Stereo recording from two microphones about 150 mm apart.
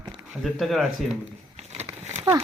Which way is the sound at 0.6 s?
Centre (ahead or behind).